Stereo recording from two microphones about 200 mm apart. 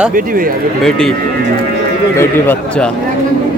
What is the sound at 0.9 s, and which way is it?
Speech, centre (ahead or behind).